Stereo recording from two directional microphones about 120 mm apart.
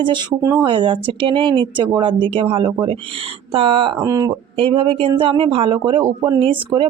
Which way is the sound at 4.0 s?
30° right (ahead or behind).